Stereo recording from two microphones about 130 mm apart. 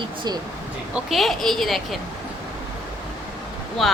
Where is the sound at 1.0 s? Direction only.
Centre (ahead or behind).